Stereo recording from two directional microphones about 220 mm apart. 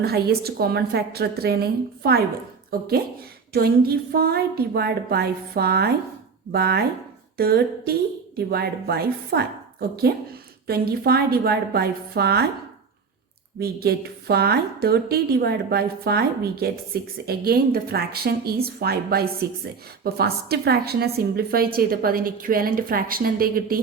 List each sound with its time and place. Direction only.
0.0 s a woman's voice: 45° right (ahead or behind)
7.3 s a sound: 45° right (ahead or behind)
8.4 s a woman's voice: 45° right (ahead or behind)
13.6 s a woman's voice: 45° right (ahead or behind)